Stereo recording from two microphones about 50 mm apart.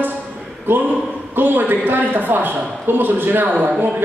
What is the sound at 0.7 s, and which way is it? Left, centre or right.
A man's voice, right.